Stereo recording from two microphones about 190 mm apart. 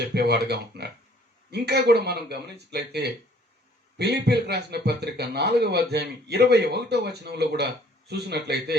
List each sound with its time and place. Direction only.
0.0 s a man's voice: 60° right (ahead or behind)